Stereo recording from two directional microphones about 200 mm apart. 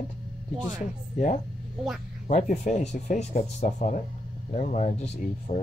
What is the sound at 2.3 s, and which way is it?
Speech, 40° left (ahead or behind).